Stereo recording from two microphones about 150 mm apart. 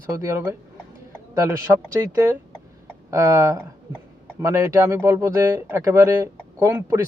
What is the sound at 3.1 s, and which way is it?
A man's voice, 20° right (ahead or behind).